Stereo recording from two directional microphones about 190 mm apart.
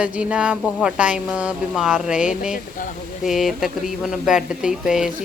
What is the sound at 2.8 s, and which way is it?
Speech, 45° left (ahead or behind).